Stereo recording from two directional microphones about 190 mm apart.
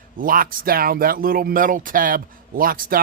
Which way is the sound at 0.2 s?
50° right (ahead or behind).